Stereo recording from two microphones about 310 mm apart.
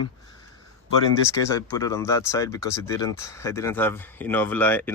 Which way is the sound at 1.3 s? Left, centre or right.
Centre.